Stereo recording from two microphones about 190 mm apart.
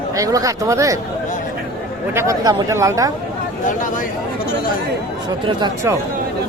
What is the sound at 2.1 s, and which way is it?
Speech, 15° right (ahead or behind).